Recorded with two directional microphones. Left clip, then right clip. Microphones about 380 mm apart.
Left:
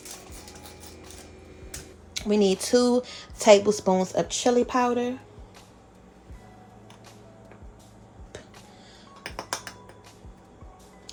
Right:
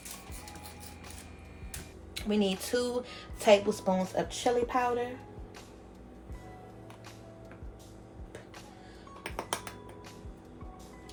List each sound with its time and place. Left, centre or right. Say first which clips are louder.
2.1 s speech: left 8 dB; centre